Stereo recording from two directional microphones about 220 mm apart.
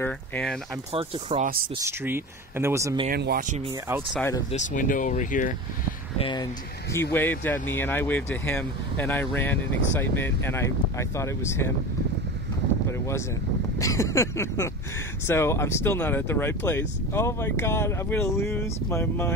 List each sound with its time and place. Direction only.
0.0 s speech: 5° left (ahead or behind)
0.9 s speech: 25° right (ahead or behind)
1.8 s speech: 10° right (ahead or behind)
3.1 s speech: 45° right (ahead or behind)
4.5 s speech: 35° left (ahead or behind)
6.1 s speech: 20° left (ahead or behind)
13.7 s speech: 15° left (ahead or behind)